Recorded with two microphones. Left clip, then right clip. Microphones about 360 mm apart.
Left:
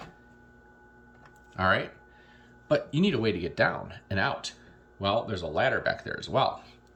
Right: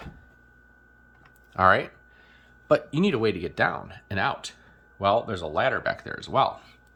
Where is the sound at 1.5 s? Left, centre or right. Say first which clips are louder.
Right 6 dB; centre.